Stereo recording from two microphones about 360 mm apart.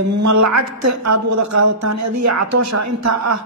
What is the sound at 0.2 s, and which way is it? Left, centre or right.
A woman's voice, right.